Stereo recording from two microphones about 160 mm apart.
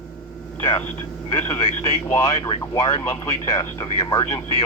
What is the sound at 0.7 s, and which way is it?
Radio, 15° left (ahead or behind).